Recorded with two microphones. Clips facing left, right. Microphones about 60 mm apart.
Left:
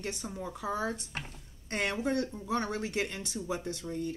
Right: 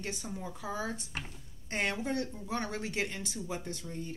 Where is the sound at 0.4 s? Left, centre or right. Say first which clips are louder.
Left 4 dB; left.